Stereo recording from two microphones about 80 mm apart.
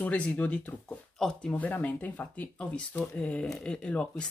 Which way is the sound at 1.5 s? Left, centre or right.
Left.